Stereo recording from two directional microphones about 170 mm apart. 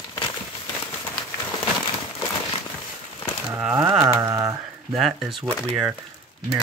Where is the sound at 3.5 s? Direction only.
10° right (ahead or behind).